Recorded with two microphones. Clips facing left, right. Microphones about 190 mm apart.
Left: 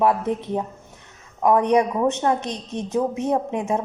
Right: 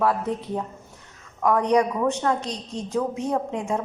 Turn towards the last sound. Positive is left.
turn(degrees=20)  # may be behind; listen again after turning